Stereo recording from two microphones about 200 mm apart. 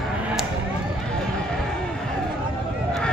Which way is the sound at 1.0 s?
5° left (ahead or behind).